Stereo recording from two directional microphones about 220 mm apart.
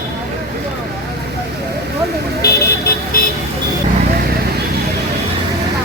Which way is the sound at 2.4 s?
45° left (ahead or behind).